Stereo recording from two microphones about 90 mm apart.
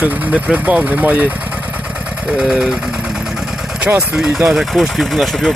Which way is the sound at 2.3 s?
5° right (ahead or behind).